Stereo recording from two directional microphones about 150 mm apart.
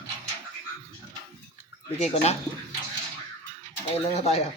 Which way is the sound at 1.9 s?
45° left (ahead or behind).